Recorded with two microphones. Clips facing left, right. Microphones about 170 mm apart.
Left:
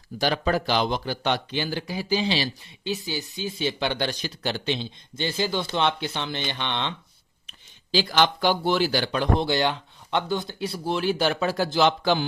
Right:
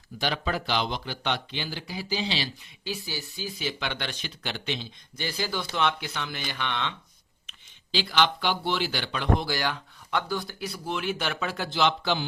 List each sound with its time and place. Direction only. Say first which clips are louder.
0.2 s a man's voice: left 5 dB; 45° left (ahead or behind)
2.8 s speech: left 5 dB; 20° left (ahead or behind)
7.9 s a man's voice: left 3 dB; 45° left (ahead or behind)
9.4 s speech: left 6 dB; 25° left (ahead or behind); by 12.2 s 45° left (ahead or behind)